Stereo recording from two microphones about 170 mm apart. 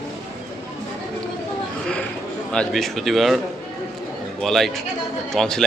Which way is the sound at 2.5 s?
5° left (ahead or behind).